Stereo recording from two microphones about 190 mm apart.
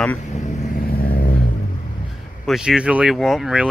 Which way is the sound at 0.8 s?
50° left (ahead or behind).